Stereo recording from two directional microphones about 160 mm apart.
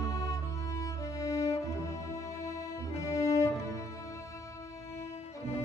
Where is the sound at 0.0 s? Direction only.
20° left (ahead or behind).